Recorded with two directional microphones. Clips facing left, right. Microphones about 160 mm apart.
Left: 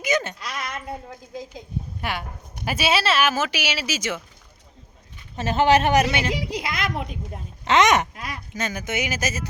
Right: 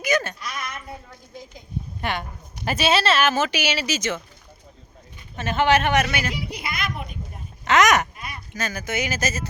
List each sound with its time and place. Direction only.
0.0 s a sound: 20° left (ahead or behind)
2.0 s speech: 5° left (ahead or behind)
5.4 s speech: 35° left (ahead or behind)
6.3 s a woman's voice: 90° left
7.6 s speech: 25° left (ahead or behind)
8.1 s a sound: 90° left
8.5 s speech: 20° left (ahead or behind)